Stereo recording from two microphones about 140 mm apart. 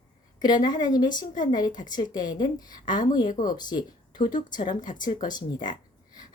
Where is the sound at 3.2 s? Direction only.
70° left (ahead or behind).